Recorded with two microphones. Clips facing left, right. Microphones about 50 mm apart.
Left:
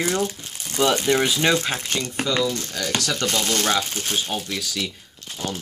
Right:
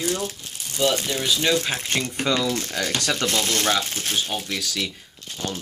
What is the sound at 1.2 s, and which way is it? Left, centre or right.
Speech, left.